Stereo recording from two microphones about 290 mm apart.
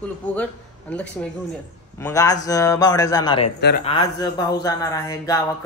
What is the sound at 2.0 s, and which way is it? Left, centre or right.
Speech, centre.